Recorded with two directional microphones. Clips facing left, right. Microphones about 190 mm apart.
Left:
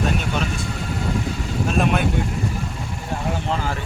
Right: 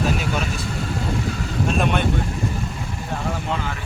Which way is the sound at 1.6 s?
Centre (ahead or behind).